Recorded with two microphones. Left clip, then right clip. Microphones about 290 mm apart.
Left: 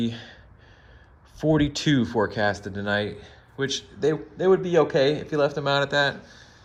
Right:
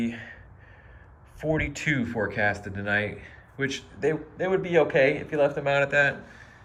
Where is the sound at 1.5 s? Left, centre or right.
Centre.